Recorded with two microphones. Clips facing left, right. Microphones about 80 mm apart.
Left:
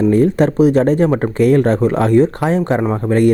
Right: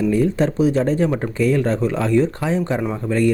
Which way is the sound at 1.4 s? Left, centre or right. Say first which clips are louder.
Left 6 dB; left.